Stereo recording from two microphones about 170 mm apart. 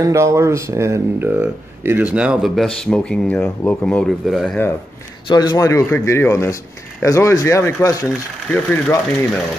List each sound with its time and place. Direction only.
0.0 s speech: 15° right (ahead or behind); by 4.6 s centre (ahead or behind)
5.3 s speech: 25° left (ahead or behind)
8.5 s speech: 5° left (ahead or behind)